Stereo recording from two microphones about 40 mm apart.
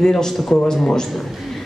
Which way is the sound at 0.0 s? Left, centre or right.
Centre.